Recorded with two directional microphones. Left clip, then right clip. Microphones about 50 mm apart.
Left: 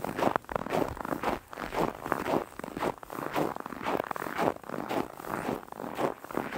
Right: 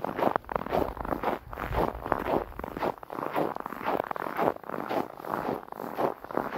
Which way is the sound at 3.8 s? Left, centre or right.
Left.